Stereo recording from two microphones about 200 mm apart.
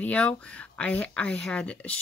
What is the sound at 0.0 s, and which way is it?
Speech, 5° left (ahead or behind).